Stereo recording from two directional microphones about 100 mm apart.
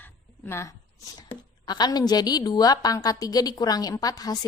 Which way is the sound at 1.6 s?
45° left (ahead or behind).